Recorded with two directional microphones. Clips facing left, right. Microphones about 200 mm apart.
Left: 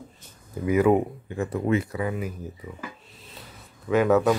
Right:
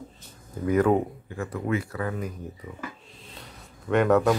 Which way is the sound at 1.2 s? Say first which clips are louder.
Left 4 dB; 25° left (ahead or behind).